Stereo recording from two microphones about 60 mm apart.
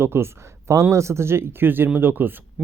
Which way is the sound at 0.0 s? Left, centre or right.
Right.